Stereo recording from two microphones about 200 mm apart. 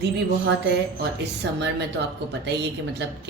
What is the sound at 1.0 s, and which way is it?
Speech, 60° right (ahead or behind).